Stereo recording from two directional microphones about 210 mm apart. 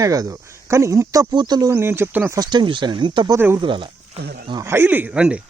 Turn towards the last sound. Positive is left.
turn(degrees=-5)  # may be behind; listen again after turning